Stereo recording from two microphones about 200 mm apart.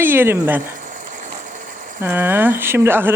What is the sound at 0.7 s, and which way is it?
Sewing machine, 40° right (ahead or behind).